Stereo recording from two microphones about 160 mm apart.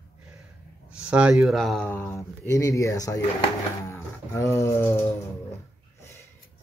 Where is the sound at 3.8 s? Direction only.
15° left (ahead or behind).